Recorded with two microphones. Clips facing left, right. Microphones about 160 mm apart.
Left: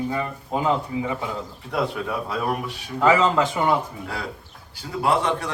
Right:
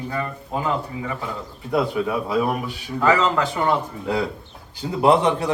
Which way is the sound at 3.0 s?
20° left (ahead or behind).